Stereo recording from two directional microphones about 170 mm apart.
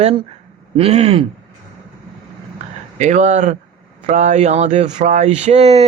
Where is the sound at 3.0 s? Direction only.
45° right (ahead or behind).